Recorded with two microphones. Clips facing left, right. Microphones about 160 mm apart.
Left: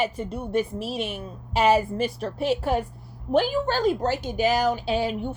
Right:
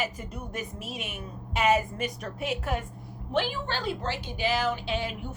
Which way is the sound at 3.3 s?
40° left (ahead or behind).